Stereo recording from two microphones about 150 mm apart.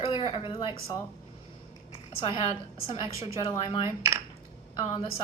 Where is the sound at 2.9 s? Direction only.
35° left (ahead or behind).